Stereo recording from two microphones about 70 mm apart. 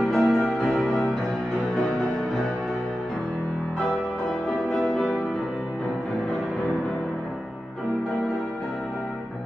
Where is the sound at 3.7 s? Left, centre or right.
Centre.